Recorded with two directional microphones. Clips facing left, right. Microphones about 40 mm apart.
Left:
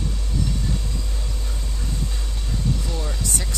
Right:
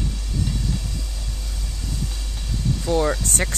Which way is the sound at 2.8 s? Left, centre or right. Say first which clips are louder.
Right 9 dB; right.